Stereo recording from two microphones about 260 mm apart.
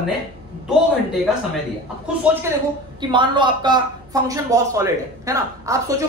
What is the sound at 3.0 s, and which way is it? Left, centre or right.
A woman's voice, centre.